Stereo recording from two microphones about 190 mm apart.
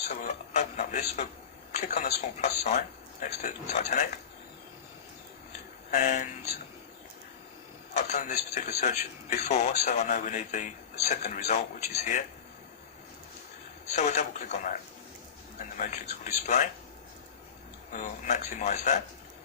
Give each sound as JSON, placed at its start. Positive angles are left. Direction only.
{"t": 0.1, "sound": "speech", "side_deg": 40}
{"t": 5.9, "sound": "speech", "side_deg": 40}
{"t": 7.9, "sound": "speech", "side_deg": 35}
{"t": 13.8, "sound": "speech", "side_deg": 35}
{"t": 17.9, "sound": "speech", "side_deg": 40}